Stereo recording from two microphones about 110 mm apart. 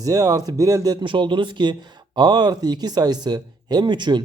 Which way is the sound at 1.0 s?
45° right (ahead or behind).